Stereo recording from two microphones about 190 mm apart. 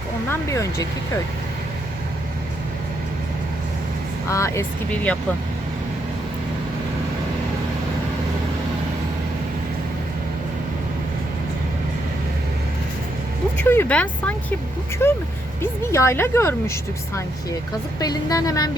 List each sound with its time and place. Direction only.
0.3 s speech: 15° left (ahead or behind)
4.3 s speech: 15° left (ahead or behind)
13.7 s speech: 10° left (ahead or behind)
18.0 s speech: 20° left (ahead or behind)